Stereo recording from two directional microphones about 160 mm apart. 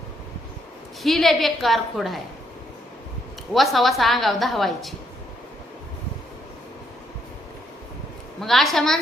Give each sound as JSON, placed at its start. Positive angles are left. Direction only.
{"t": 1.0, "sound": "a woman's voice", "side_deg": 0}
{"t": 3.5, "sound": "a woman's voice", "side_deg": 0}
{"t": 8.4, "sound": "a woman's voice", "side_deg": 0}